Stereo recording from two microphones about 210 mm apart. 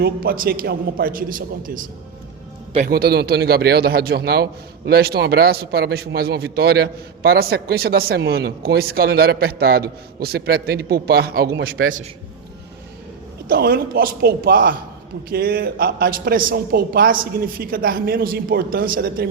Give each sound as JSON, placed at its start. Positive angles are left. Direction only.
{"t": 0.0, "sound": "a man's voice", "side_deg": -45}
{"t": 13.5, "sound": "a man's voice", "side_deg": -45}